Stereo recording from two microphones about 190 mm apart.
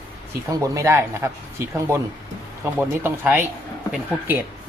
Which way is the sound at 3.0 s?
10° right (ahead or behind).